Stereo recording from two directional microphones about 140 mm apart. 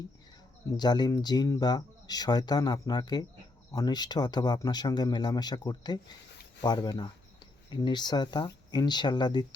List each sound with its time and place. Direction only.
0.8 s speech: 30° left (ahead or behind)